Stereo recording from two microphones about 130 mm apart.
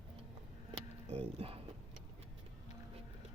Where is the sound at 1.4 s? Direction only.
50° right (ahead or behind).